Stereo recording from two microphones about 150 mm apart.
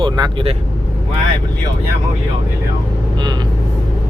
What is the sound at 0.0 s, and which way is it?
Speech, 35° right (ahead or behind).